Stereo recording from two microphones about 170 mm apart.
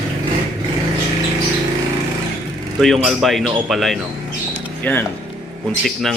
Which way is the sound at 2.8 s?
Centre (ahead or behind).